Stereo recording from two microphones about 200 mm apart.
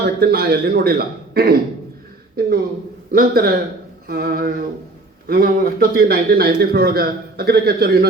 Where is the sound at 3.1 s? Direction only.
45° right (ahead or behind).